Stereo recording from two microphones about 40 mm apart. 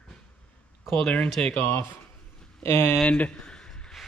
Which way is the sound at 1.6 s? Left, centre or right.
Left.